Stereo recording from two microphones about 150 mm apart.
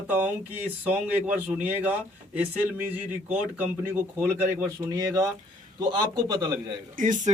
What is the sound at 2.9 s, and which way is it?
A man's voice, 10° right (ahead or behind).